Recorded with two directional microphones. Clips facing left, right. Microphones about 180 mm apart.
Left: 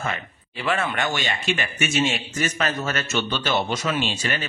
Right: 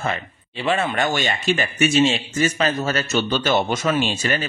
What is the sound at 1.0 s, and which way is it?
A man's voice, 45° right (ahead or behind).